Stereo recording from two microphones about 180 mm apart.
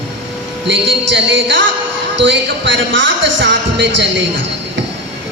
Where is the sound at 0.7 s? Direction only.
85° right.